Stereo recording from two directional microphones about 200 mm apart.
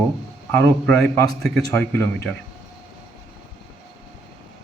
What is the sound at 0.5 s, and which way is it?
A man's voice, 5° left (ahead or behind).